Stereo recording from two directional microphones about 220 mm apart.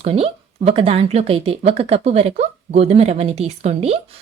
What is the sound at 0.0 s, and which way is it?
Speech, 25° right (ahead or behind).